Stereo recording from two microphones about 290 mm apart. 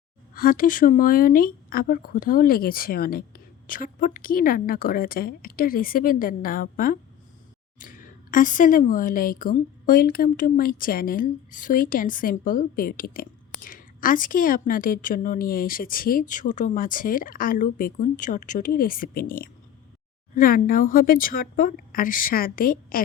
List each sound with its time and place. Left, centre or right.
0.3 s speech: left